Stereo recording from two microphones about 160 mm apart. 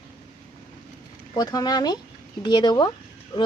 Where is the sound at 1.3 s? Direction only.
25° left (ahead or behind).